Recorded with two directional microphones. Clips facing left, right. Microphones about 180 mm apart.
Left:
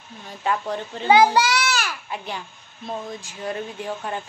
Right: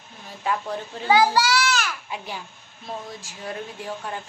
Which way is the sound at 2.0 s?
10° right (ahead or behind).